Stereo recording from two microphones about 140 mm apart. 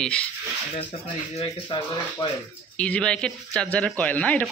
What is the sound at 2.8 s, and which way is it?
Speech, 5° left (ahead or behind).